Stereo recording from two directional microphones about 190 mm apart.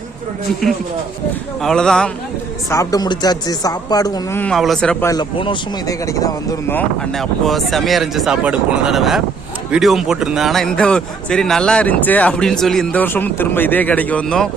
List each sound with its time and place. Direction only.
1.6 s a man's voice: 5° left (ahead or behind)
2.6 s a woman's voice: 20° left (ahead or behind)
5.1 s a man's voice: 25° left (ahead or behind); by 14.5 s 5° left (ahead or behind)